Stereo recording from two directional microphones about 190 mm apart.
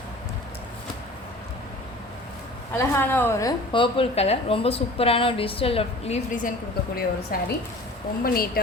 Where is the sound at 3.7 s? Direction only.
30° left (ahead or behind).